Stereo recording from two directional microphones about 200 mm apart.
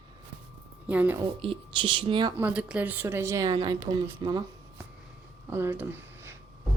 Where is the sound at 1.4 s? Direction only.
25° right (ahead or behind).